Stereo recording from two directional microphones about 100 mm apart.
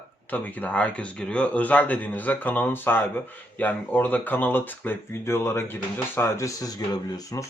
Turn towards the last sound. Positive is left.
turn(degrees=35)  # may be behind; listen again after turning